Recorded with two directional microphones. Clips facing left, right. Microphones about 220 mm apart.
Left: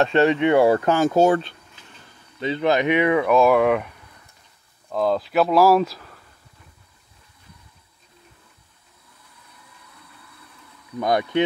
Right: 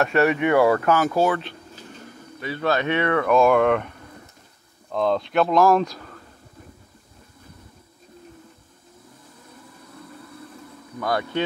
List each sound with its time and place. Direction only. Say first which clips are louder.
0.0 s speech: left 2 dB; 20° left (ahead or behind)
2.4 s speech: left 3 dB; 20° left (ahead or behind)
4.9 s speech: left 1 dB; 5° left (ahead or behind)
9.9 s a sound: right 13 dB; 45° right (ahead or behind)
11.0 s speech: left 4 dB; 20° left (ahead or behind)